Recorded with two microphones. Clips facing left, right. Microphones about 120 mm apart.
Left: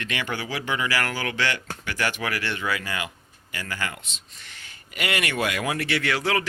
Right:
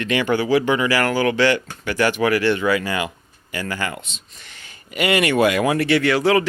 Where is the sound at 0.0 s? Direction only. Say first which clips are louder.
Right 11 dB; 30° right (ahead or behind).